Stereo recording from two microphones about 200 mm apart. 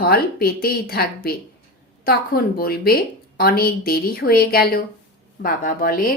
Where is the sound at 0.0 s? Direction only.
50° left (ahead or behind).